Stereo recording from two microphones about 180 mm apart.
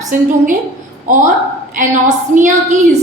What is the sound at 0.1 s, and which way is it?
Speech, 45° right (ahead or behind).